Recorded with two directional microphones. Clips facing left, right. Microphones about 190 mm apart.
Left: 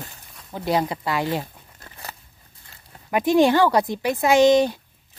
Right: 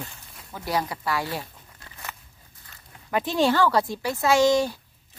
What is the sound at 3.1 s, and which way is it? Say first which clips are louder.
Speech: left 5 dB; 15° left (ahead or behind).